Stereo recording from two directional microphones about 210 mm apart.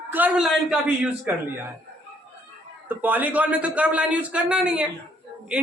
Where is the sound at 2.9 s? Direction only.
10° right (ahead or behind).